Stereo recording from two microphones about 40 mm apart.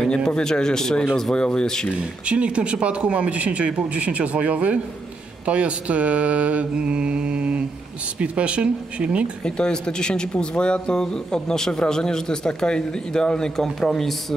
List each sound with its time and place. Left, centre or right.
0.3 s speech: centre
2.0 s speech: right
9.4 s speech: centre
13.6 s speech: centre